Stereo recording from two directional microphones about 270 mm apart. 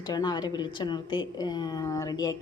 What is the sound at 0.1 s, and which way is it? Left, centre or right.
A woman's voice, centre.